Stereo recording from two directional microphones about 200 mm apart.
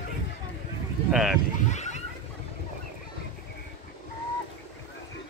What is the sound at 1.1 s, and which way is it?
Speech, centre (ahead or behind).